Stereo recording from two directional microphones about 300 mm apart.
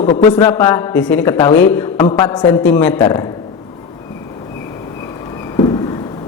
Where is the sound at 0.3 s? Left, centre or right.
Centre.